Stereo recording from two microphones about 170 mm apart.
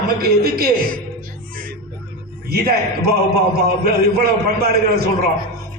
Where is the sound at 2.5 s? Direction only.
65° right (ahead or behind).